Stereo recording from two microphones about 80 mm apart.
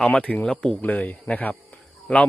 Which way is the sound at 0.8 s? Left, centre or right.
Centre.